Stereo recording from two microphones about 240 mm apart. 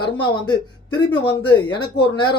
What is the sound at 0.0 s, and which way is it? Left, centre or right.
Speech, centre.